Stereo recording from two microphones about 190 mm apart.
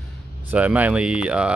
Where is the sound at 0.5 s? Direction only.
10° right (ahead or behind).